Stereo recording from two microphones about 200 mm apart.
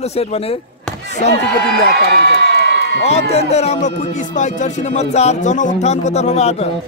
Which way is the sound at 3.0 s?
30° left (ahead or behind).